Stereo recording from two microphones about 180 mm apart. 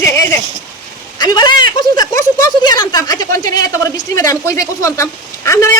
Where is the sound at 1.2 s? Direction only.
25° left (ahead or behind).